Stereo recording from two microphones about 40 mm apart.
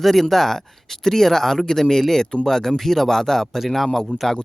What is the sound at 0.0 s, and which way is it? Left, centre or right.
Speech, centre.